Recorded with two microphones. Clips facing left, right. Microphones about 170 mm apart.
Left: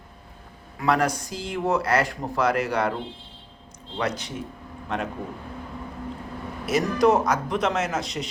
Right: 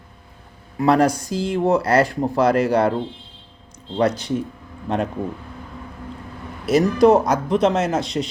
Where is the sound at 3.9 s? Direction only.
35° right (ahead or behind).